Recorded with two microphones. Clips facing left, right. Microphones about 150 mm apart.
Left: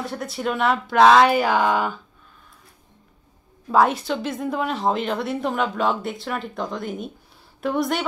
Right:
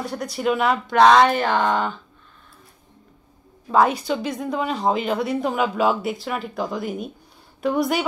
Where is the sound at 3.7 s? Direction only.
Centre (ahead or behind).